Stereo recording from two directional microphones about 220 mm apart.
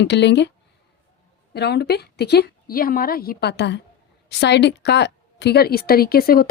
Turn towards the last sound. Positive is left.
turn(degrees=40)  # may be behind; listen again after turning